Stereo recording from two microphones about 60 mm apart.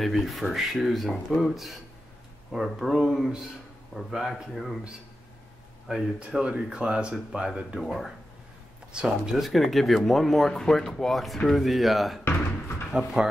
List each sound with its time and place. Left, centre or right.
0.0 s speech: centre
5.9 s speech: centre
7.8 s speech: centre
8.9 s speech: centre
9.3 s speech: centre
12.3 s a sound: left
12.9 s speech: centre